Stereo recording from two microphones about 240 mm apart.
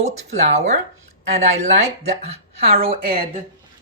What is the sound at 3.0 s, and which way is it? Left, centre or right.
Speech, right.